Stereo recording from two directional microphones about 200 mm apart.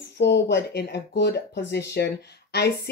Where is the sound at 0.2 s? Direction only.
60° left (ahead or behind).